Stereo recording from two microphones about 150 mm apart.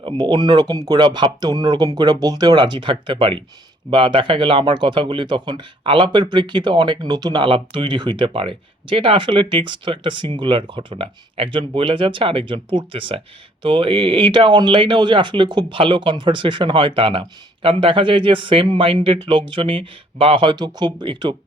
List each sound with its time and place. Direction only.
0.0 s speech: 30° right (ahead or behind)